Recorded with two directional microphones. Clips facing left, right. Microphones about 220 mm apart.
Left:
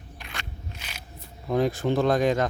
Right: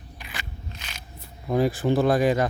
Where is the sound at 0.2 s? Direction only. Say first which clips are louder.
Right 1 dB; 5° right (ahead or behind).